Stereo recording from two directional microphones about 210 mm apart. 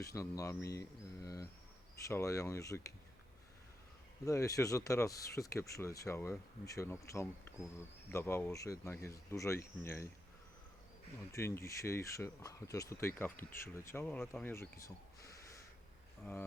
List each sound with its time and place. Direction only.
0.0 s speech: 15° left (ahead or behind)
4.3 s speech: 15° left (ahead or behind)
11.3 s speech: 15° left (ahead or behind)